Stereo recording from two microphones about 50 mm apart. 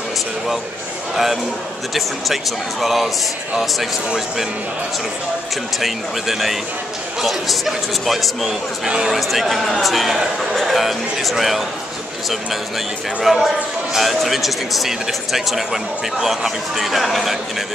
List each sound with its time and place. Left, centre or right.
1.1 s speech: centre
5.8 s speech: centre
8.8 s speech: centre
9.1 s speech: centre
13.2 s speech: centre